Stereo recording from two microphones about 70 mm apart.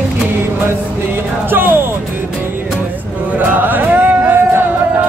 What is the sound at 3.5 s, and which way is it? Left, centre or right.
Music, right.